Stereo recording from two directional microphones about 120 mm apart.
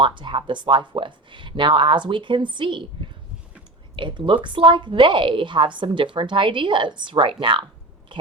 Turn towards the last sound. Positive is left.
turn(degrees=-45)  # may be behind; listen again after turning